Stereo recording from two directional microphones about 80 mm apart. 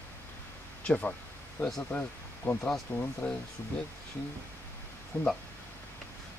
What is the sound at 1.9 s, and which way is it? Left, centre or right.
Speech, left.